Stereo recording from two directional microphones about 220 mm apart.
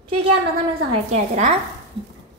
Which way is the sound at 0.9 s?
30° right (ahead or behind).